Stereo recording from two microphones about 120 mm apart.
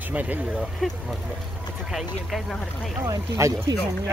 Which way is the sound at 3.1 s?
25° right (ahead or behind).